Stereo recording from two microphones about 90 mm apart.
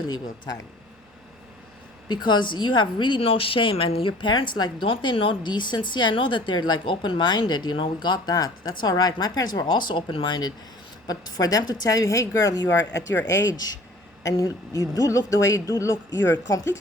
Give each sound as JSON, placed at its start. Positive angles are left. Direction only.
{"t": 0.0, "sound": "speech", "side_deg": 45}
{"t": 2.0, "sound": "a woman's voice", "side_deg": 55}
{"t": 4.9, "sound": "a woman's voice", "side_deg": 75}
{"t": 11.0, "sound": "a woman's voice", "side_deg": 45}